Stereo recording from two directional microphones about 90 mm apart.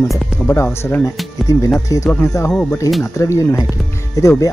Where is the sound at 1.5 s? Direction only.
40° left (ahead or behind).